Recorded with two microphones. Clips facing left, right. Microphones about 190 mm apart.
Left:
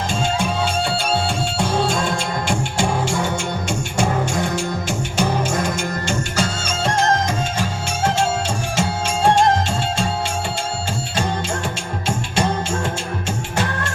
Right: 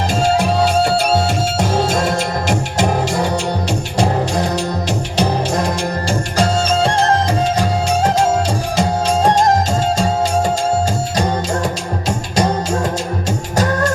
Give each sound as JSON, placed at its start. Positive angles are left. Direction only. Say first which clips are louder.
{"t": 0.3, "sound": "music", "louder": "right 9 dB", "side_deg": -40}
{"t": 12.0, "sound": "music", "louder": "right 3 dB", "side_deg": -40}